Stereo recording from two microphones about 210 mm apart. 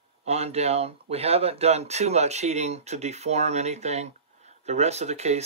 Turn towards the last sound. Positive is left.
turn(degrees=-30)  # may be behind; listen again after turning